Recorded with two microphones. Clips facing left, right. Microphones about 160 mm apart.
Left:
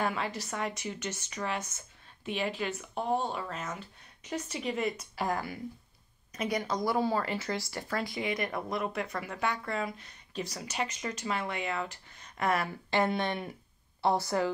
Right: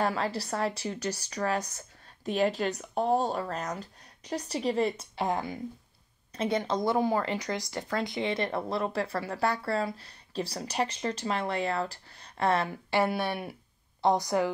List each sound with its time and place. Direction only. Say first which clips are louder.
0.0 s speech: right 3 dB; 35° right (ahead or behind)
12.9 s speech: right 1 dB; 10° right (ahead or behind)